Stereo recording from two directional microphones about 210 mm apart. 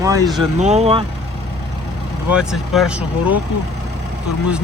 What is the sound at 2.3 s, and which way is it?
Speech, 5° right (ahead or behind).